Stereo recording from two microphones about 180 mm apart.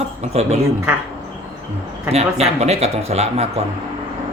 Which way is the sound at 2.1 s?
35° right (ahead or behind).